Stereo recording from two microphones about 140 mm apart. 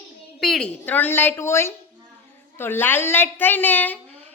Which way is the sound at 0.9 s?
15° left (ahead or behind).